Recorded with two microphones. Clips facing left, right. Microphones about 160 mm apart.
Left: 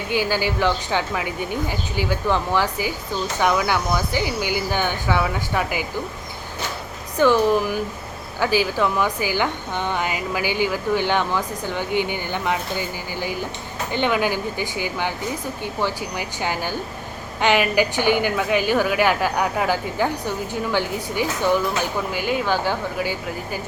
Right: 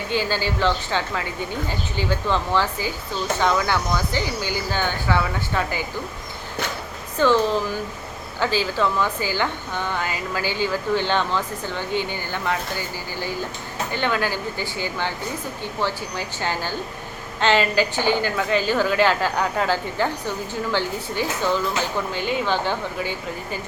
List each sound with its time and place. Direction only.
0.1 s a woman's voice: 15° left (ahead or behind)
7.2 s a woman's voice: 15° left (ahead or behind)